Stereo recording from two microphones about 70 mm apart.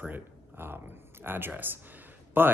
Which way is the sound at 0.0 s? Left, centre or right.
Right.